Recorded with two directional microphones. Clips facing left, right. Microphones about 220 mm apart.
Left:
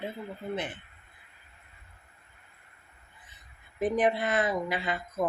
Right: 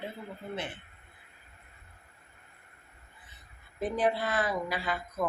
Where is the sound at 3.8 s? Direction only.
20° left (ahead or behind).